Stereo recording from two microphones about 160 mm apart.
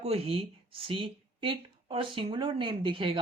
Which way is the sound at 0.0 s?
40° right (ahead or behind).